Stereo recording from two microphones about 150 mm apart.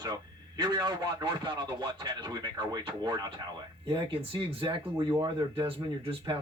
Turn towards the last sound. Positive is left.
turn(degrees=-35)  # may be behind; listen again after turning